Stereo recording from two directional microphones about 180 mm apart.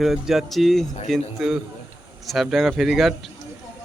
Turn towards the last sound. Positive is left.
turn(degrees=0)  # may be behind; listen again after turning